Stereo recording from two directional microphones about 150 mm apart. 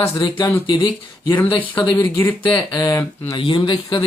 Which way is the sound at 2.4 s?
25° left (ahead or behind).